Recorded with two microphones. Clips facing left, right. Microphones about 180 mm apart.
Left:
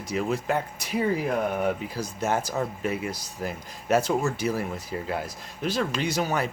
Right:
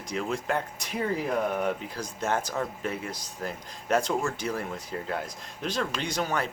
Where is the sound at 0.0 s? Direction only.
5° left (ahead or behind).